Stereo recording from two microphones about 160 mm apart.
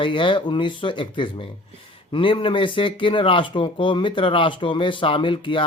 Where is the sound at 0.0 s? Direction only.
30° left (ahead or behind).